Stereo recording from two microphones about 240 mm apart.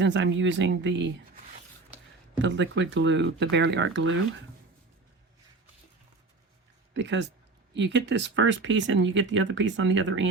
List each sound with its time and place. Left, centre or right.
0.0 s speech: right
2.4 s speech: right
6.9 s speech: right